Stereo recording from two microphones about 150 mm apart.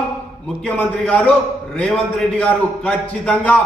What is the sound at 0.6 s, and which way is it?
A man's voice, 10° left (ahead or behind).